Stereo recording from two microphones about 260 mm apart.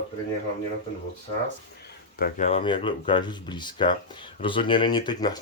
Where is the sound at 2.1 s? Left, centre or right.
Left.